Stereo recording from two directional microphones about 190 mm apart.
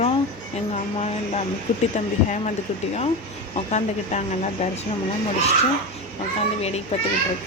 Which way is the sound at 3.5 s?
35° left (ahead or behind).